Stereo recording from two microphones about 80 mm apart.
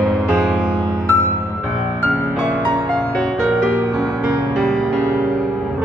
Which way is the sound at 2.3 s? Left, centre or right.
Centre.